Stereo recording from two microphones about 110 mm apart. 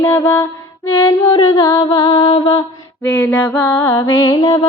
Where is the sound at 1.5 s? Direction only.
40° left (ahead or behind).